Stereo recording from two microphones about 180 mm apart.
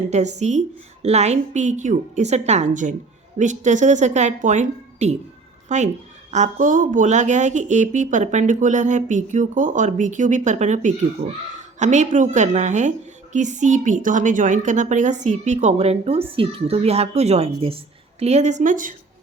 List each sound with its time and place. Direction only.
0.1 s a woman's voice: 40° right (ahead or behind)